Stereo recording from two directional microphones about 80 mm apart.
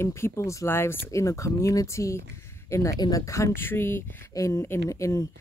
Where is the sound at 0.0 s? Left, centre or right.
Left.